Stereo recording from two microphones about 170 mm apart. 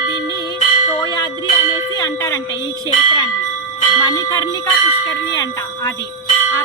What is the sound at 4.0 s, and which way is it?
Speech, 20° left (ahead or behind).